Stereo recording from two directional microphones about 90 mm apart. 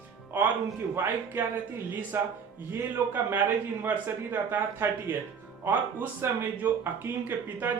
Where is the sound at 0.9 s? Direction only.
25° right (ahead or behind).